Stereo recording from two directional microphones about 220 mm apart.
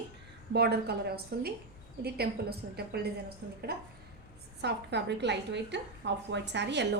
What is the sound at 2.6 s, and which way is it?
A woman's voice, 50° right (ahead or behind).